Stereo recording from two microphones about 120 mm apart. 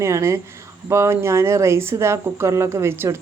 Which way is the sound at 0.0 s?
25° right (ahead or behind).